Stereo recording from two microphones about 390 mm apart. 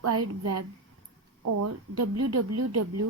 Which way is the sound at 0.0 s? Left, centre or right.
Right.